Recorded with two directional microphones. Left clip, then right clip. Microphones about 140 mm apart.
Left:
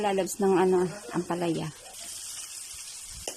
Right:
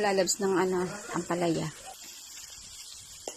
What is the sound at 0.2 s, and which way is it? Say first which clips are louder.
Speech: left 2 dB; 20° left (ahead or behind).